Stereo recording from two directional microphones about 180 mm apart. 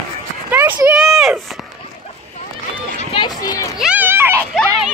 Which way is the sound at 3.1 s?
25° left (ahead or behind).